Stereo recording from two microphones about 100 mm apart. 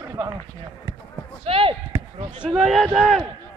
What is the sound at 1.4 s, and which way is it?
Speech, 70° right (ahead or behind).